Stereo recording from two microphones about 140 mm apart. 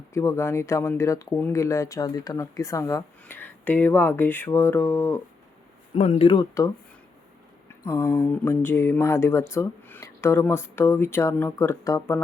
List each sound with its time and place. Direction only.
0.1 s speech: 20° left (ahead or behind)
6.0 s speech: 45° left (ahead or behind); by 6.7 s 25° left (ahead or behind)
7.9 s speech: 15° left (ahead or behind)